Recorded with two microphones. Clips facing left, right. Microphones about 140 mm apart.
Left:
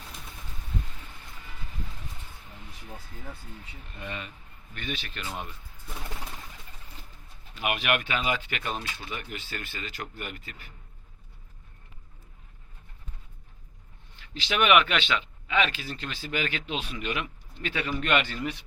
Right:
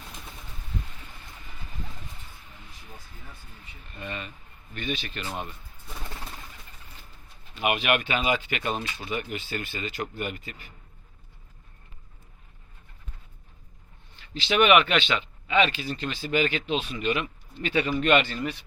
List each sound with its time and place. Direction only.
3.9 s speech: 5° left (ahead or behind)
4.7 s speech: 5° right (ahead or behind)
5.2 s speech: 20° right (ahead or behind)
7.6 s speech: 5° right (ahead or behind)
14.5 s speech: centre (ahead or behind)